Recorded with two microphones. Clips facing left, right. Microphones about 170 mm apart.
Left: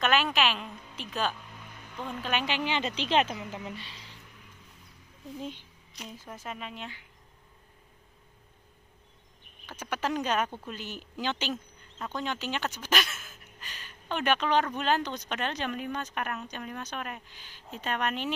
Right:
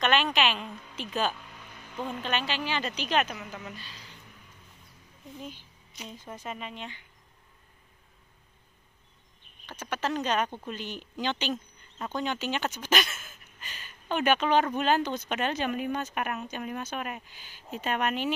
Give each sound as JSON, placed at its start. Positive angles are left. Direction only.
{"t": 0.0, "sound": "a woman's voice", "side_deg": 5}
{"t": 2.3, "sound": "speech", "side_deg": 15}
{"t": 5.9, "sound": "speech", "side_deg": 0}
{"t": 9.7, "sound": "speech", "side_deg": 10}